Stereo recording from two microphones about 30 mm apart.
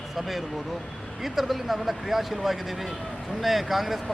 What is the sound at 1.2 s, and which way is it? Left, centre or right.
Speech, centre.